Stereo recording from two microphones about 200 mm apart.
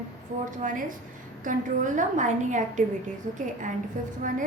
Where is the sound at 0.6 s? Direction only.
40° right (ahead or behind).